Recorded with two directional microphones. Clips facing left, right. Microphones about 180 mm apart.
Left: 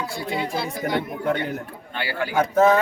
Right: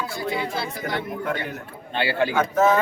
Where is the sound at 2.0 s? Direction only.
25° right (ahead or behind).